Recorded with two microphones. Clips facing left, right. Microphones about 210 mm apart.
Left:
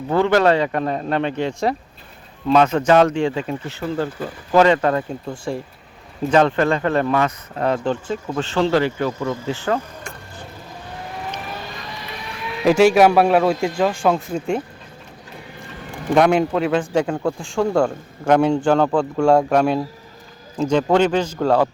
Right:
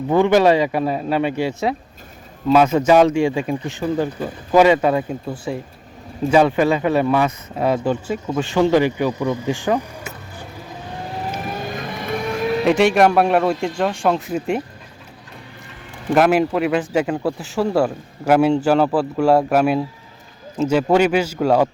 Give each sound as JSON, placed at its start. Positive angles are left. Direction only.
{"t": 0.1, "sound": "speech", "side_deg": -15}
{"t": 11.3, "sound": "vehicle", "side_deg": -45}
{"t": 12.6, "sound": "speech", "side_deg": 0}
{"t": 16.1, "sound": "speech", "side_deg": -5}